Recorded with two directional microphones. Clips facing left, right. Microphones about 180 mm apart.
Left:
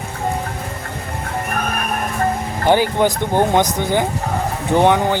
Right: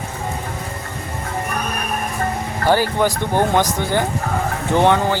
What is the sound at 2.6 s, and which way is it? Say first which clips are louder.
Speech: left 2 dB; 20° left (ahead or behind).